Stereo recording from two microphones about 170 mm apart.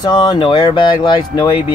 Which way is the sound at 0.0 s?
25° left (ahead or behind).